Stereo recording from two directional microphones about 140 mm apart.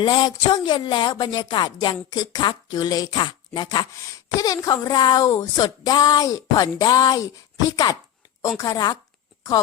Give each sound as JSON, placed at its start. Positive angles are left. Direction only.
{"t": 0.0, "sound": "speech", "side_deg": 30}